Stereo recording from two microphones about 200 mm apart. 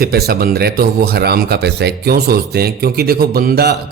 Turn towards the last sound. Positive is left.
turn(degrees=-50)  # may be behind; listen again after turning